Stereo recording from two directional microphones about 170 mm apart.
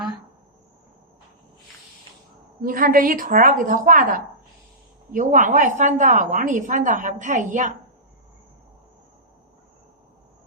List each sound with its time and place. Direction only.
2.6 s a woman's voice: 55° right (ahead or behind)